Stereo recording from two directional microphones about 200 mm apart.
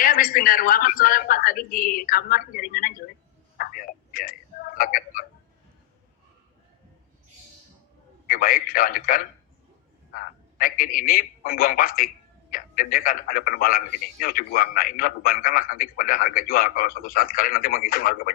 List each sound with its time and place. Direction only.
0.0 s a man's voice: 45° left (ahead or behind)
3.6 s a sound: 45° left (ahead or behind)
8.3 s a man's voice: 45° left (ahead or behind)